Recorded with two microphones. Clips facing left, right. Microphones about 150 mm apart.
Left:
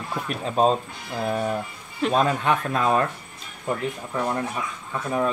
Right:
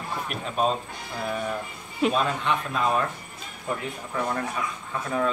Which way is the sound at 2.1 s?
45° left (ahead or behind).